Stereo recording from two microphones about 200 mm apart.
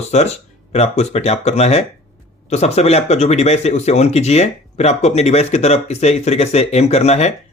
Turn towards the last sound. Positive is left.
turn(degrees=35)  # may be behind; listen again after turning